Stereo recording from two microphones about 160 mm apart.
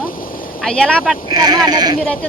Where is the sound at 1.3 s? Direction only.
25° right (ahead or behind).